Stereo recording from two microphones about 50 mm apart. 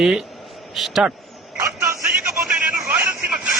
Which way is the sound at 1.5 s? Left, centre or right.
Right.